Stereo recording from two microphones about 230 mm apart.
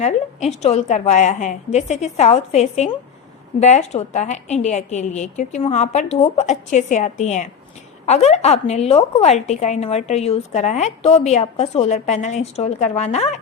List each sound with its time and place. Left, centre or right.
0.0 s a woman's voice: left